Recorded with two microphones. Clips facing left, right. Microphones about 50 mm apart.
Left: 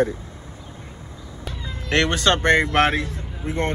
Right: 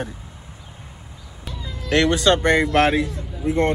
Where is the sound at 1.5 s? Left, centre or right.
Left.